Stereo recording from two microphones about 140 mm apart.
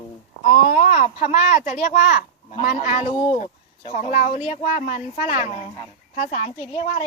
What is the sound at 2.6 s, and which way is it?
A child's voice, 60° left (ahead or behind).